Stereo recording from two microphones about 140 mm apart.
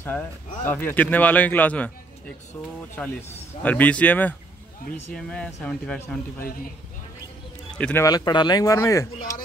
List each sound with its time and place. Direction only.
0.0 s speech: 15° left (ahead or behind)
7.7 s speech: 10° left (ahead or behind)
8.0 s speech: 30° left (ahead or behind)